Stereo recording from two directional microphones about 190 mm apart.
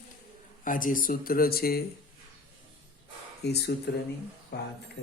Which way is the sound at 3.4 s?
60° left (ahead or behind).